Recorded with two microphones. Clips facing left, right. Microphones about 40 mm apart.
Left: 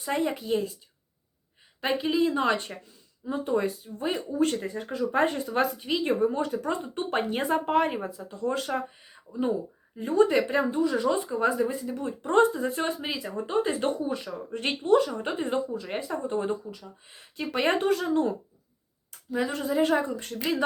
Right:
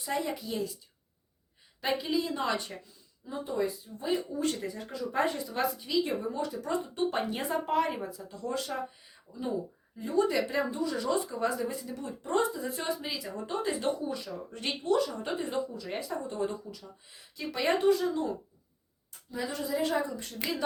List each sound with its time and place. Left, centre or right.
0.0 s speech: left
1.8 s speech: left
3.2 s speech: left
19.3 s speech: left